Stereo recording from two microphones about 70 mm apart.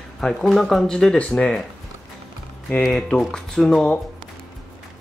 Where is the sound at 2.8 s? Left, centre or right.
Centre.